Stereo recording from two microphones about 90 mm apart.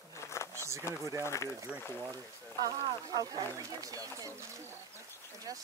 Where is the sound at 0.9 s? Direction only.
35° right (ahead or behind).